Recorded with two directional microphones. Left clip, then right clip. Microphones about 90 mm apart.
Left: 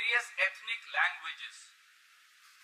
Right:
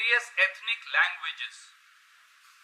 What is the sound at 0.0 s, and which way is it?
A man's voice, 20° right (ahead or behind).